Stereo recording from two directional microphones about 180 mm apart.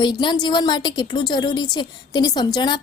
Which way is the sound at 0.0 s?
25° left (ahead or behind).